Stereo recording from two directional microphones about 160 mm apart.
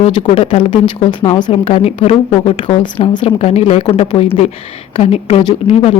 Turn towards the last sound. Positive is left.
turn(degrees=35)  # may be behind; listen again after turning